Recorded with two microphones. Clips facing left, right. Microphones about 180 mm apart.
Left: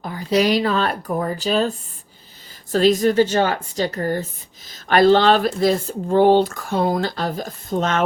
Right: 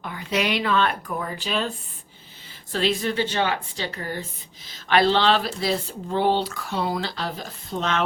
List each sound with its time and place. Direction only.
0.0 s speech: 35° left (ahead or behind)
2.7 s speech: 40° left (ahead or behind)